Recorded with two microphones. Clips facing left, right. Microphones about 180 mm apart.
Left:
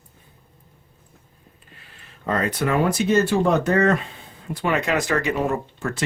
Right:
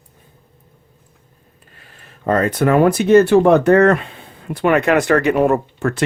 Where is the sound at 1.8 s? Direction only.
45° right (ahead or behind).